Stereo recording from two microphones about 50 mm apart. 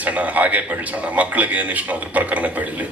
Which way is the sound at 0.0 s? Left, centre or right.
Right.